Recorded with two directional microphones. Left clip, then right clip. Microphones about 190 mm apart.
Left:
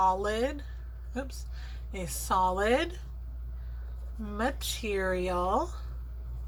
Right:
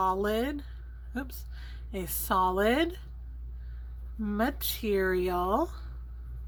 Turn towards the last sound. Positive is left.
turn(degrees=-45)  # may be behind; listen again after turning